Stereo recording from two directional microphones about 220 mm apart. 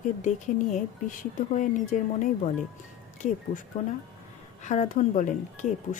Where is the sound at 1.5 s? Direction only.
35° left (ahead or behind).